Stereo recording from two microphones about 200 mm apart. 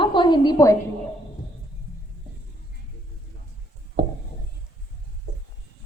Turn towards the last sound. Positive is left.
turn(degrees=-45)  # may be behind; listen again after turning